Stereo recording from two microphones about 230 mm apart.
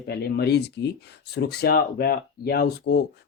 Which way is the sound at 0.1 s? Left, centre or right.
Left.